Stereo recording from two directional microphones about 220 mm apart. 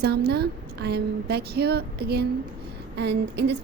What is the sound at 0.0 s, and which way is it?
A woman's voice, 45° right (ahead or behind).